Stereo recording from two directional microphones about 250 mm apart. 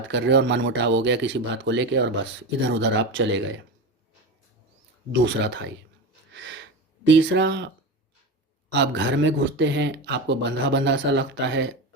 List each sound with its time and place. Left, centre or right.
0.1 s speech: right
5.2 s speech: right
6.3 s a sound: right
7.2 s speech: right
8.7 s speech: right